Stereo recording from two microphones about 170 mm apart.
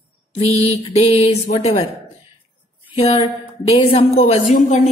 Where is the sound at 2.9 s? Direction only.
35° left (ahead or behind).